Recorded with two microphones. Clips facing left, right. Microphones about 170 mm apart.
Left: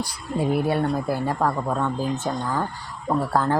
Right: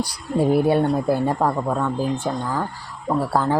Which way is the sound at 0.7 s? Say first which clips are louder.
Right 4 dB; 25° right (ahead or behind).